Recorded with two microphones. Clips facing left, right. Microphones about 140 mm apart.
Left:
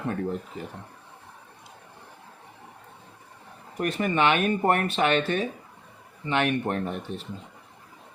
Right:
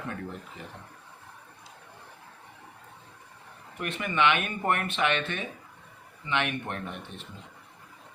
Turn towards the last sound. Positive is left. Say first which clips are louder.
# left 8 dB
turn(degrees=40)  # may be behind; listen again after turning